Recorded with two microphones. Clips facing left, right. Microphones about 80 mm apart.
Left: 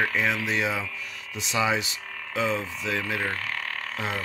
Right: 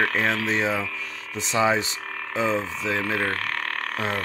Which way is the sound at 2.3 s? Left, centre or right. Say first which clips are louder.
Right 3 dB; right.